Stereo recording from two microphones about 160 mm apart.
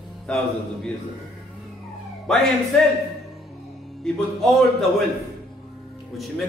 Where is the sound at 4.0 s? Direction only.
Centre (ahead or behind).